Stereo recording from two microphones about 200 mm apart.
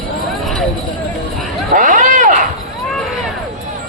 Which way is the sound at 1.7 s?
40° right (ahead or behind).